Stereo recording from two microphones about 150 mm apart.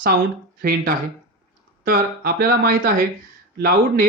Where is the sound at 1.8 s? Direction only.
85° right.